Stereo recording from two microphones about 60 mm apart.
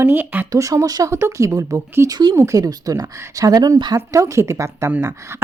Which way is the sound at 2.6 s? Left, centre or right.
Right.